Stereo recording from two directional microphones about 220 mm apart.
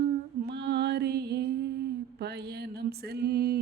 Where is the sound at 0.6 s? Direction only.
50° right (ahead or behind).